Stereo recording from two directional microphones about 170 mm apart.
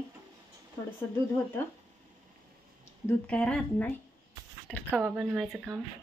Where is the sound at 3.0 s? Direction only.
10° left (ahead or behind).